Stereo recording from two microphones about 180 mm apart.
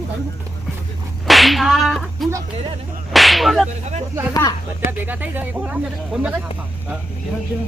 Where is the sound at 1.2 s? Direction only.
Centre (ahead or behind).